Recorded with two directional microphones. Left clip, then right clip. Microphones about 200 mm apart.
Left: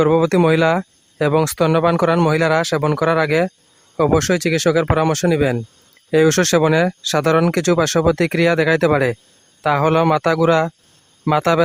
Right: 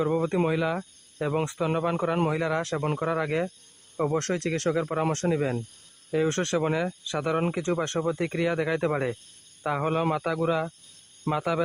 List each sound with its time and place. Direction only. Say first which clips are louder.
0.0 s speech: left 11 dB; 50° left (ahead or behind)